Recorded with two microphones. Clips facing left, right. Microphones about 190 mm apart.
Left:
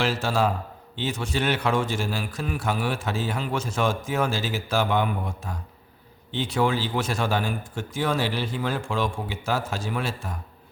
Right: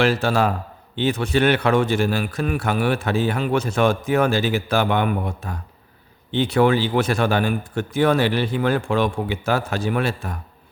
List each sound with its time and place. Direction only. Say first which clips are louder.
0.0 s a man's voice: right 5 dB; 60° right (ahead or behind)